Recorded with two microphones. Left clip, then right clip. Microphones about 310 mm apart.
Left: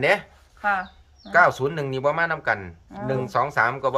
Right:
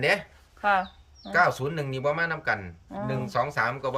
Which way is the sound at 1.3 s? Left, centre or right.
Centre.